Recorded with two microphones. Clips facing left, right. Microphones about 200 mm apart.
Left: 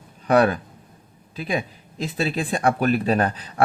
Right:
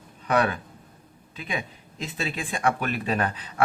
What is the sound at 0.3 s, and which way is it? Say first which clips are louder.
Speech: left 6 dB; 35° left (ahead or behind).